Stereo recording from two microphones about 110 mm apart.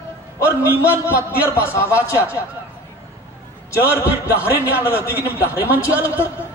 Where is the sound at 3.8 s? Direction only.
15° right (ahead or behind).